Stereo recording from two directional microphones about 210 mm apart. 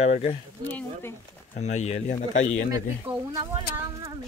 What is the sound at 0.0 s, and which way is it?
Speech, 30° left (ahead or behind).